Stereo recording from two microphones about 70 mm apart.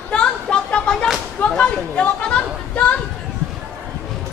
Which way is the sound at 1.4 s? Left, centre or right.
Centre.